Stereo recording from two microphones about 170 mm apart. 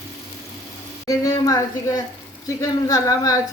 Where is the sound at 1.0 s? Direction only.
20° left (ahead or behind).